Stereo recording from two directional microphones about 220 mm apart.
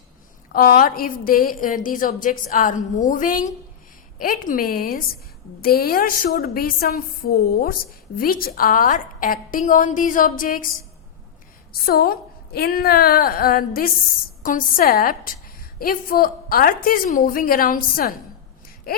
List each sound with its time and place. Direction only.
0.5 s a woman's voice: 40° left (ahead or behind)
11.7 s a woman's voice: 45° left (ahead or behind)
18.9 s a sound: 45° left (ahead or behind)